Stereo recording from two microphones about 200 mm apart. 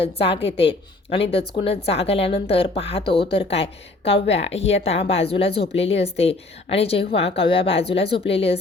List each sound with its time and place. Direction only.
0.0 s a woman's voice: 30° left (ahead or behind)